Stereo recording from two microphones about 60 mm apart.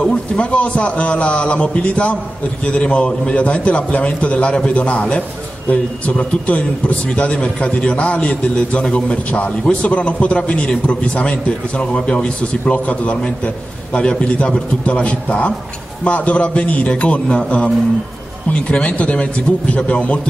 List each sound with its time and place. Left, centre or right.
0.0 s a man's voice: centre